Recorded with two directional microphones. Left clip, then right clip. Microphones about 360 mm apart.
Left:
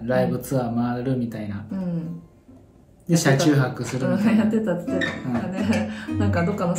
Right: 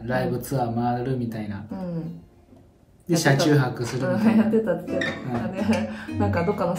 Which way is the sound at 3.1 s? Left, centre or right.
Centre.